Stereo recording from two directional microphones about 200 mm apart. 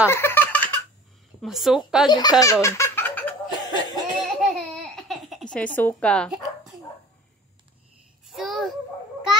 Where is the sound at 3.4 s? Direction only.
20° left (ahead or behind).